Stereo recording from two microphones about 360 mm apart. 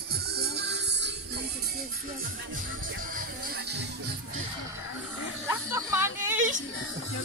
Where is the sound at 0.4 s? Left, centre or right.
Right.